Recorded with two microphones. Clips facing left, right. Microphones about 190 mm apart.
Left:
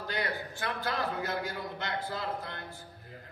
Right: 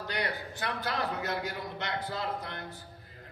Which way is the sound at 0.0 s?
20° right (ahead or behind).